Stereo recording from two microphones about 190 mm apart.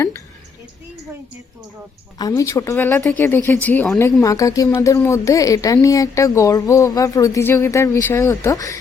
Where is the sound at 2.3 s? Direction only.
15° left (ahead or behind).